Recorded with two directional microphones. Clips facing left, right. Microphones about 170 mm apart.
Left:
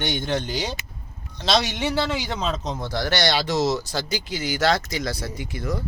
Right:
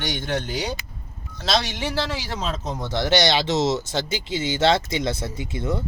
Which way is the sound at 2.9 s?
20° right (ahead or behind).